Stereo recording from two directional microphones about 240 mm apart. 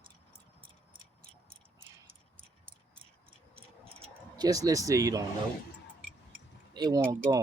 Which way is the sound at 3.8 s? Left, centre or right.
Centre.